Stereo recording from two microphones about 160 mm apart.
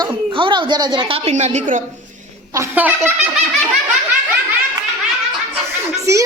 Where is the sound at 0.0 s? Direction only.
30° right (ahead or behind); by 1.8 s 50° right (ahead or behind).